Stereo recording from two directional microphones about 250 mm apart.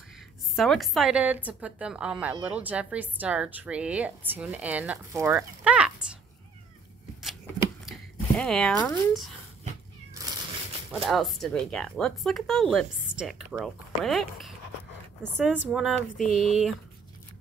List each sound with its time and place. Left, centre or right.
0.6 s a woman's voice: centre
8.4 s a woman's voice: centre
10.9 s a woman's voice: centre